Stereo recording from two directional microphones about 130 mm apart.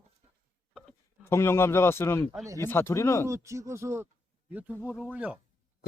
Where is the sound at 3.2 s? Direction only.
25° right (ahead or behind).